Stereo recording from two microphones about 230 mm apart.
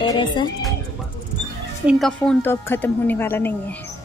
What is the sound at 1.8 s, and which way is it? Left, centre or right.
A woman's voice, centre.